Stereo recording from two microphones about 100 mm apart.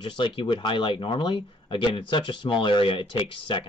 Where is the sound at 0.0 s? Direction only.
55° left (ahead or behind).